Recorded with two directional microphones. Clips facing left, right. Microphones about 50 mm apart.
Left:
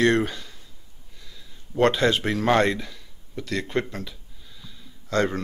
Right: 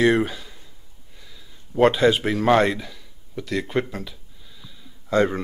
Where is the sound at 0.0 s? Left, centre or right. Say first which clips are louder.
Right 2 dB; centre.